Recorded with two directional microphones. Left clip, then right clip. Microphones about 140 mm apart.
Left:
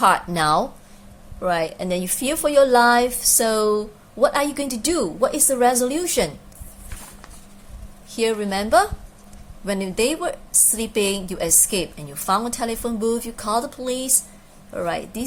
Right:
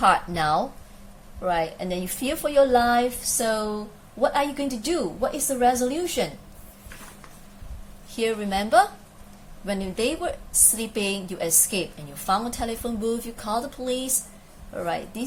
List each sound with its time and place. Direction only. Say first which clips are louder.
0.0 s a woman's voice: left 3 dB; 35° left (ahead or behind)
8.1 s a woman's voice: left 3 dB; 30° left (ahead or behind)